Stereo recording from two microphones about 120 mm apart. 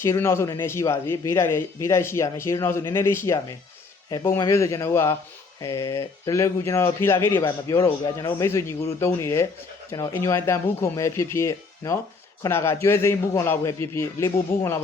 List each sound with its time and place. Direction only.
0.0 s a man's voice: 20° left (ahead or behind)